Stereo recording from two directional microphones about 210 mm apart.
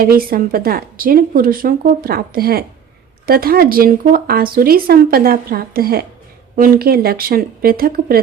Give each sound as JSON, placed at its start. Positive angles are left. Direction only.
{"t": 0.0, "sound": "speech", "side_deg": -45}